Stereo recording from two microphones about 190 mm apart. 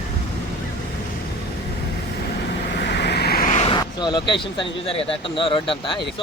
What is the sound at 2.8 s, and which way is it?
Vehicle, 60° left (ahead or behind).